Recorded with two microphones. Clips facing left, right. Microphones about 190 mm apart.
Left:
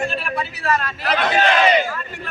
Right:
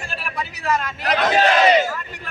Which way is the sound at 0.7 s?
15° right (ahead or behind).